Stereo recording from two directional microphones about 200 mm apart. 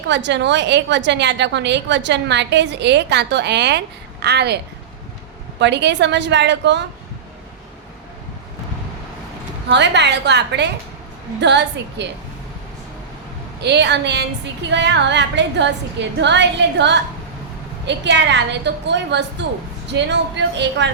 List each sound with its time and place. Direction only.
0.1 s a woman's voice: 60° right (ahead or behind)
9.6 s a woman's voice: 60° right (ahead or behind)
13.6 s a woman's voice: 60° right (ahead or behind)